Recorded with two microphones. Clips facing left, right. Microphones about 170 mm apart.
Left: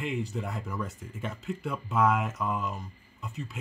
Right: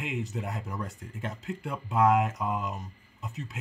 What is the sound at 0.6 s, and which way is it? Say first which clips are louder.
Speech: left 1 dB; 35° right (ahead or behind).